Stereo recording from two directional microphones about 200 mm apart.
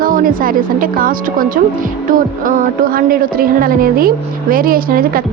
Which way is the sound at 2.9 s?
45° right (ahead or behind).